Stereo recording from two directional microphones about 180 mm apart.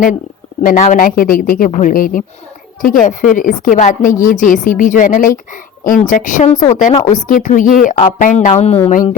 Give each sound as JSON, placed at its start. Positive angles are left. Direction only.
{"t": 0.6, "sound": "speech", "side_deg": 50}